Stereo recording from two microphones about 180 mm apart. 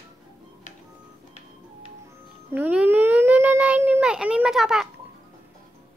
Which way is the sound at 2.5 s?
10° right (ahead or behind).